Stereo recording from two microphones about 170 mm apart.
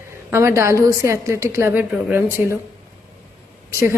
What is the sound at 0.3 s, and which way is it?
A woman's voice, 15° right (ahead or behind).